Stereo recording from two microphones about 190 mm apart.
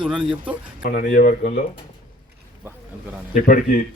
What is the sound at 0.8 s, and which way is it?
Speech, 50° left (ahead or behind).